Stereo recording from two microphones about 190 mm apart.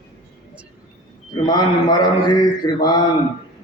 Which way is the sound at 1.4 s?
20° left (ahead or behind).